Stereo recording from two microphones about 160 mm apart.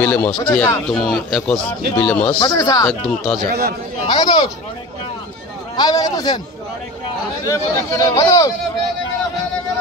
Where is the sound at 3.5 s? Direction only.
70° right (ahead or behind).